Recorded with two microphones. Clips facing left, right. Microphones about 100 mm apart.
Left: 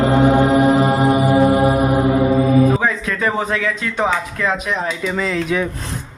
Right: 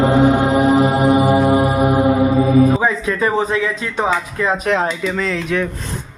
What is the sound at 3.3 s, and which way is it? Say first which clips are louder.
Speech: right 2 dB; 25° right (ahead or behind).